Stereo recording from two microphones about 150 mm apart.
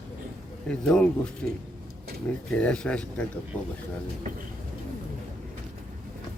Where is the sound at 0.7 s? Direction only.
5° left (ahead or behind).